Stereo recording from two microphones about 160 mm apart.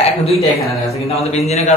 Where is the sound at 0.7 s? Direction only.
Centre (ahead or behind).